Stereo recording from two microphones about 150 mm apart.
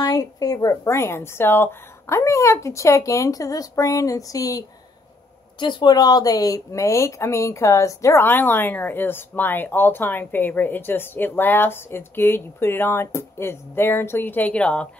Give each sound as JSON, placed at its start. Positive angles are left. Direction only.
{"t": 0.0, "sound": "a woman's voice", "side_deg": 25}